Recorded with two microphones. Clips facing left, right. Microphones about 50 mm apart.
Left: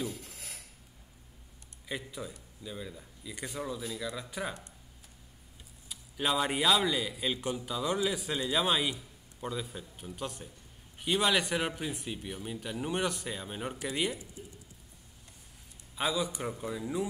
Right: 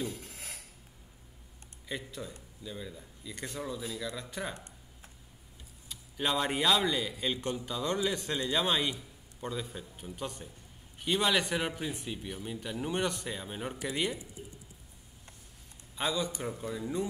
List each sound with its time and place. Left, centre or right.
0.1 s a sound: right
1.9 s a man's voice: centre
5.9 s a man's voice: centre
16.0 s a man's voice: centre